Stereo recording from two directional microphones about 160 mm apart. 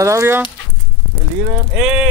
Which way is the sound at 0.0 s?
15° right (ahead or behind).